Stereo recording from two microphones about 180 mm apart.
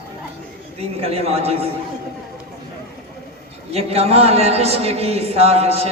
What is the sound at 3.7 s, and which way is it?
A man's voice, 35° right (ahead or behind).